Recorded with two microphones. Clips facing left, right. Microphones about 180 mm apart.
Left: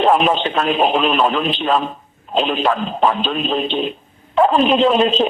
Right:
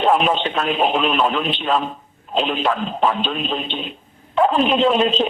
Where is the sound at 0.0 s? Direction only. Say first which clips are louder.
Left 2 dB; 50° left (ahead or behind).